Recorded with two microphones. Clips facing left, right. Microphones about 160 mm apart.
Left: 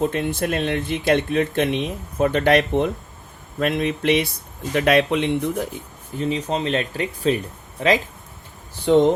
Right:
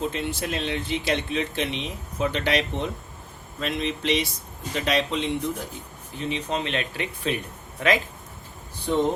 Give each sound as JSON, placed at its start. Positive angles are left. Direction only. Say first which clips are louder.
{"t": 0.0, "sound": "speech", "louder": "left 6 dB", "side_deg": 55}
{"t": 6.1, "sound": "speech", "louder": "left 5 dB", "side_deg": 40}